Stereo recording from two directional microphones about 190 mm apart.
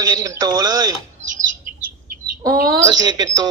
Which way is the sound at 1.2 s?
35° right (ahead or behind).